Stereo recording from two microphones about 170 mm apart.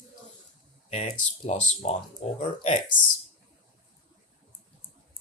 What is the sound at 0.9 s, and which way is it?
Speech, 40° left (ahead or behind).